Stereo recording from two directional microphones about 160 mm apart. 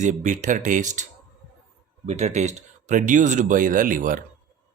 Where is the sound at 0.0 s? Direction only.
45° right (ahead or behind).